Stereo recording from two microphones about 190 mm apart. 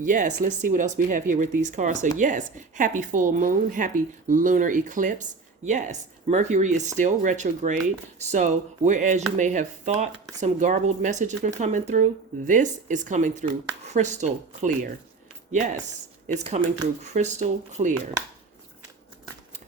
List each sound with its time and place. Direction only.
0.0 s a woman's voice: 45° right (ahead or behind)
17.0 s a woman's voice: 35° right (ahead or behind)